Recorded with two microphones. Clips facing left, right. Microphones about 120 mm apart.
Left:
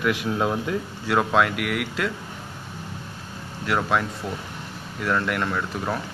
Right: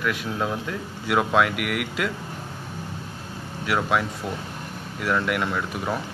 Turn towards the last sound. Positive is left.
turn(degrees=-5)  # may be behind; listen again after turning